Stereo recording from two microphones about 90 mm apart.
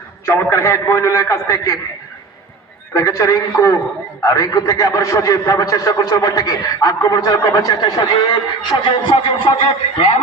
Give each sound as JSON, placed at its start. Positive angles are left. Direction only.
{"t": 0.5, "sound": "a man's voice", "side_deg": 30}
{"t": 2.9, "sound": "a man's voice", "side_deg": 35}
{"t": 9.1, "sound": "speech", "side_deg": 85}